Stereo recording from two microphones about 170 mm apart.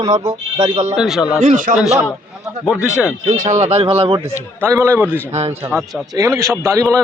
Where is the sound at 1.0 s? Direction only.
5° right (ahead or behind).